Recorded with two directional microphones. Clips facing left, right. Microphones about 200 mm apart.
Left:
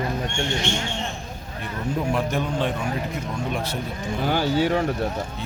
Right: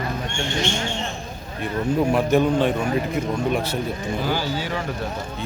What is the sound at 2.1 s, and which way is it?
Speech, 5° right (ahead or behind).